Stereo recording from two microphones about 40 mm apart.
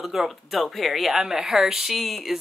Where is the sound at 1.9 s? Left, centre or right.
Centre.